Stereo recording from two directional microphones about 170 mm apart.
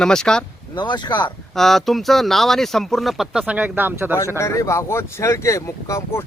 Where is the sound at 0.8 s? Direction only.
25° left (ahead or behind).